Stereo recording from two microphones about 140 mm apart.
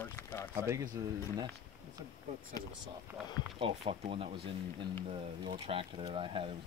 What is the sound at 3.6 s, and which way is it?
Speech, 40° right (ahead or behind).